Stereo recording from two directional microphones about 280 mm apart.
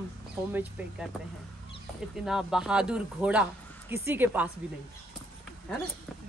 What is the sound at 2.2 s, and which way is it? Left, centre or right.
A woman's voice, centre.